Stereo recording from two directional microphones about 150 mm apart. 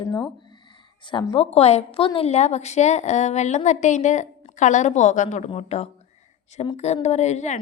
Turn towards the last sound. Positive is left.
turn(degrees=50)  # may be behind; listen again after turning